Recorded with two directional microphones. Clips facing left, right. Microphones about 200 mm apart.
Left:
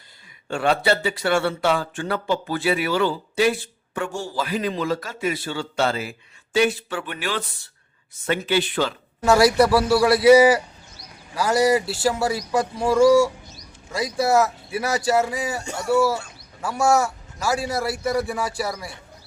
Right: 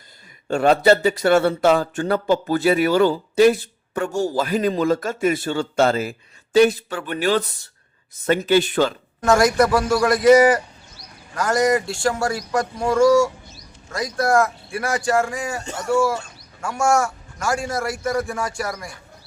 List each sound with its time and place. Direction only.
0.4 s speech: 40° right (ahead or behind)
9.2 s speech: 5° left (ahead or behind)